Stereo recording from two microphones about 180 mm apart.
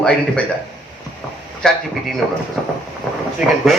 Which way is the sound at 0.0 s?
5° left (ahead or behind).